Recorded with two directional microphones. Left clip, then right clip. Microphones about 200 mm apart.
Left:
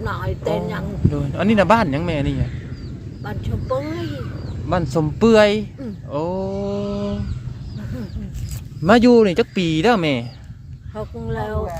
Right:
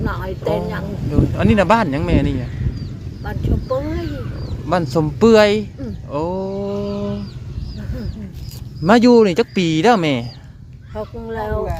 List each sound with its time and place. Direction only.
0.0 s speech: centre (ahead or behind)
4.7 s a sound: 5° right (ahead or behind)
8.8 s speech: centre (ahead or behind)